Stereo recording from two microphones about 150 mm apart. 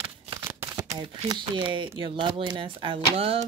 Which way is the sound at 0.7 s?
25° right (ahead or behind).